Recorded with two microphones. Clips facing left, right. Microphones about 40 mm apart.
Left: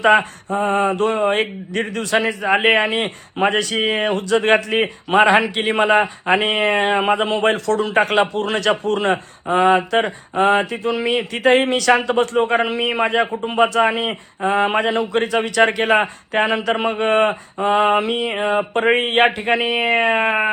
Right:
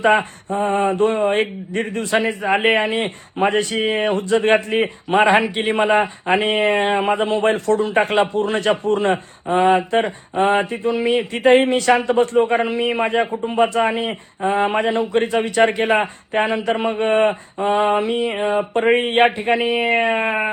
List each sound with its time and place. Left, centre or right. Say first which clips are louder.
0.0 s a man's voice: left 2 dB; left
1.7 s a man's voice: left 1 dB; left
2.2 s a man's voice: left 2 dB; left
12.6 s a man's voice: even; left
20.1 s a sound: left 2 dB; left